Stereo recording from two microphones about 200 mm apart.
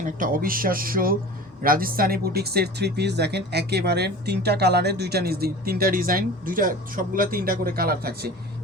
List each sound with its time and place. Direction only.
0.0 s speech: 45° right (ahead or behind)